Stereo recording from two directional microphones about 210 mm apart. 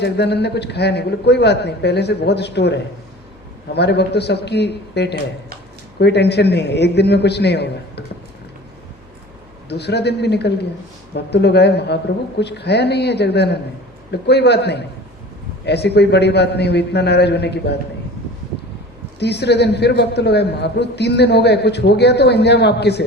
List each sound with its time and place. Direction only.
0.0 s a man's voice: 50° left (ahead or behind)
9.6 s a man's voice: 50° left (ahead or behind)
19.2 s a man's voice: 55° left (ahead or behind)